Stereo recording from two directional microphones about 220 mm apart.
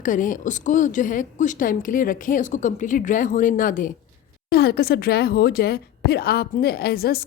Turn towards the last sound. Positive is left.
turn(degrees=45)  # may be behind; listen again after turning